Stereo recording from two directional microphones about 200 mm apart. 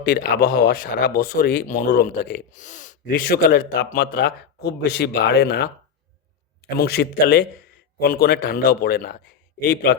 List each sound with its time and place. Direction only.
0.0 s speech: 50° left (ahead or behind)
6.7 s speech: 55° left (ahead or behind)